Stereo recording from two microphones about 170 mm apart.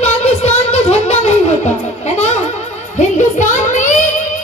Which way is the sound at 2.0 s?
40° left (ahead or behind).